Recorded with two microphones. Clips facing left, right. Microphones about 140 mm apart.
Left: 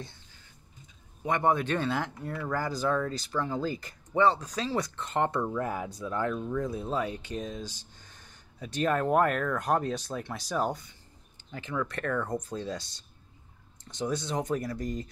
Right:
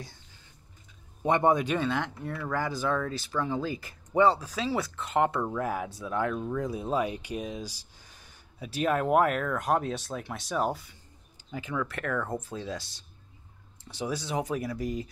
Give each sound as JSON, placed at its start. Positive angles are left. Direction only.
{"t": 1.2, "sound": "a man's voice", "side_deg": -20}
{"t": 1.8, "sound": "speech", "side_deg": 0}